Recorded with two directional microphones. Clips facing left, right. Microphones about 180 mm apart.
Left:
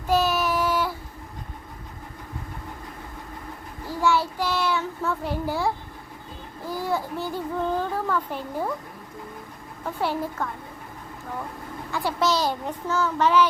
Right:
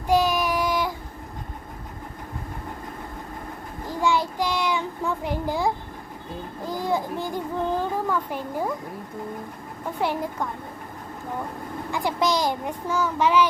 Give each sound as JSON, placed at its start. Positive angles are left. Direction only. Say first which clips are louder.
{"t": 0.1, "sound": "child singing", "louder": "right 1 dB", "side_deg": -15}
{"t": 3.8, "sound": "child singing", "louder": "even", "side_deg": -15}
{"t": 6.7, "sound": "a child's voice", "louder": "right 1 dB", "side_deg": -15}
{"t": 10.0, "sound": "a child's voice", "louder": "right 1 dB", "side_deg": -15}
{"t": 11.9, "sound": "a child's voice", "louder": "even", "side_deg": -15}